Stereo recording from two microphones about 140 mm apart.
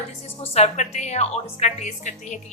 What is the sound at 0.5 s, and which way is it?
A woman's voice, 55° left (ahead or behind).